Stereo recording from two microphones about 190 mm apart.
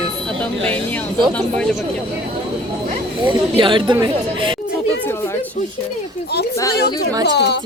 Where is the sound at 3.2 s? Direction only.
25° right (ahead or behind).